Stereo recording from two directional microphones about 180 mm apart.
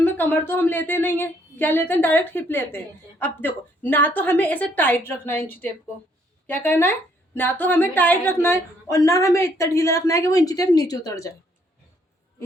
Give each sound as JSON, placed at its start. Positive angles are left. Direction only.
{"t": 0.0, "sound": "a woman's voice", "side_deg": 10}